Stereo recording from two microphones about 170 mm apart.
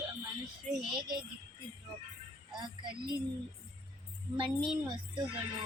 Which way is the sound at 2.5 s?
25° right (ahead or behind).